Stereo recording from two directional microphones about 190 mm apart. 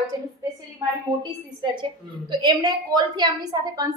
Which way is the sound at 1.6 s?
25° right (ahead or behind).